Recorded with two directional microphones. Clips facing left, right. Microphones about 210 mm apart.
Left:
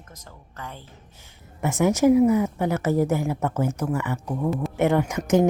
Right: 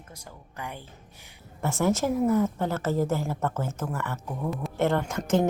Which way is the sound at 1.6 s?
15° left (ahead or behind).